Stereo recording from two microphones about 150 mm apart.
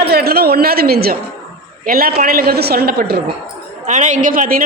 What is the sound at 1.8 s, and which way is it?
Speech, 75° right (ahead or behind).